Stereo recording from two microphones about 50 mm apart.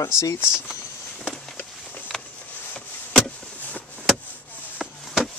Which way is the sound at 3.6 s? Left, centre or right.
Left.